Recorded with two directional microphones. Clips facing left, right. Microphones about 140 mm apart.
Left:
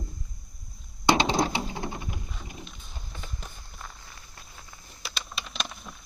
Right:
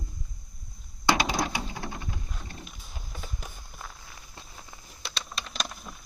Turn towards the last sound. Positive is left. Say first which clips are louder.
# even
turn(degrees=0)  # may be behind; listen again after turning